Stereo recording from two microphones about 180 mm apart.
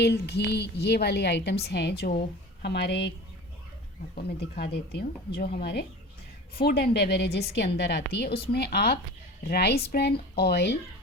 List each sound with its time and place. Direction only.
0.0 s a woman's voice: 65° left (ahead or behind)
4.1 s a woman's voice: 60° left (ahead or behind)